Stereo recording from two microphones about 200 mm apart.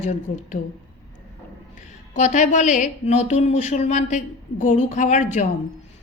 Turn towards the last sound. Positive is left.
turn(degrees=35)  # may be behind; listen again after turning